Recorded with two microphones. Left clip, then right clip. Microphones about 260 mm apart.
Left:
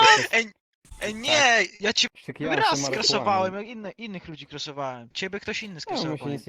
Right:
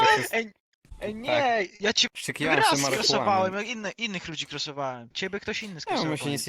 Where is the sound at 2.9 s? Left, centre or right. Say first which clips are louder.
Even; centre.